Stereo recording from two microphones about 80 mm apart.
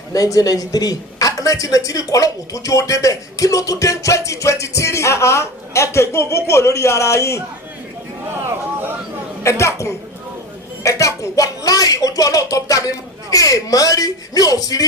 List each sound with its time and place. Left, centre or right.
0.1 s speech: left
9.4 s speech: left
10.8 s a sound: left
13.3 s speech: left